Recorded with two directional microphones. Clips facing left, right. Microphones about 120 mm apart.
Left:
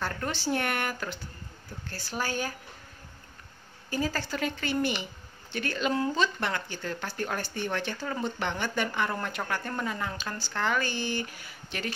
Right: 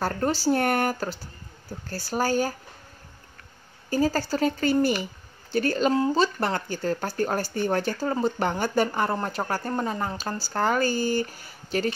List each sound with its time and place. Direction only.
0.0 s speech: 35° right (ahead or behind)
3.9 s speech: 40° right (ahead or behind)